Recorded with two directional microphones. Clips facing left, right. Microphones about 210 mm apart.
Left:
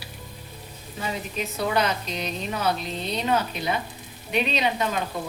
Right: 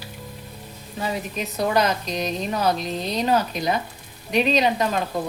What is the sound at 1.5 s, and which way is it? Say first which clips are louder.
A woman's voice: right 4 dB; 40° right (ahead or behind).